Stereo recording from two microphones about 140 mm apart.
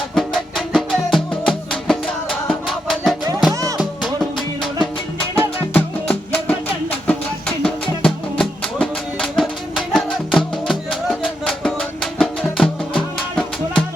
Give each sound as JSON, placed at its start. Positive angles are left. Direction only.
{"t": 0.1, "sound": "music", "side_deg": 0}
{"t": 3.5, "sound": "music", "side_deg": -25}
{"t": 3.8, "sound": "music", "side_deg": 0}
{"t": 5.4, "sound": "music", "side_deg": 10}